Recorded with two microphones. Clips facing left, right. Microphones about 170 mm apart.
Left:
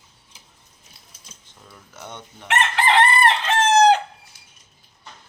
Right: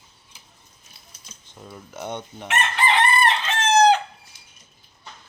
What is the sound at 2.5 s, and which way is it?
Chicken, 90° left.